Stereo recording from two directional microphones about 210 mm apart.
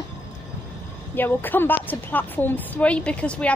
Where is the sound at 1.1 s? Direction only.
10° left (ahead or behind).